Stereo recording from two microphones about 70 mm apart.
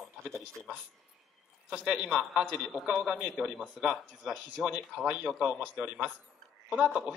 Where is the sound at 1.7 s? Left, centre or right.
Centre.